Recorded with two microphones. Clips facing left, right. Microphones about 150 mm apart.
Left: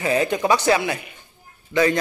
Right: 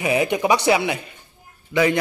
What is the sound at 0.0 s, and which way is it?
A man's voice, 15° right (ahead or behind).